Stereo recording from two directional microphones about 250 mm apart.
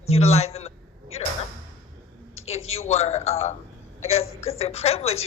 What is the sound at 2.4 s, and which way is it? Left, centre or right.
A woman's voice, left.